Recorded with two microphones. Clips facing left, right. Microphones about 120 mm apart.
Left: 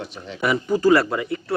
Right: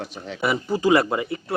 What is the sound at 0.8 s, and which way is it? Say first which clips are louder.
Speech: left 1 dB; 20° right (ahead or behind).